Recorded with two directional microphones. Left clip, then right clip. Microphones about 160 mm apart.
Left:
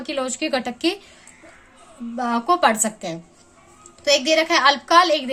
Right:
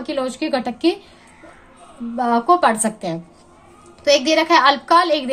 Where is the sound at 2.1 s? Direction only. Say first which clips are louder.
Right 4 dB; 20° left (ahead or behind).